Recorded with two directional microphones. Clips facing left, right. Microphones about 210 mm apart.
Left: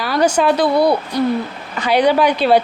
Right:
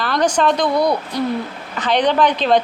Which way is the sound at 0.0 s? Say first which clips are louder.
Left 2 dB; 10° left (ahead or behind).